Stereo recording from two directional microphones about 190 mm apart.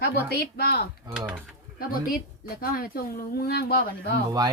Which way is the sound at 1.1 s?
5° right (ahead or behind).